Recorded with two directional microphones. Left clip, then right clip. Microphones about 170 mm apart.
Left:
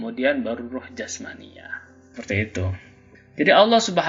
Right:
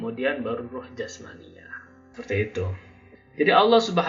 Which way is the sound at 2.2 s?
35° left (ahead or behind).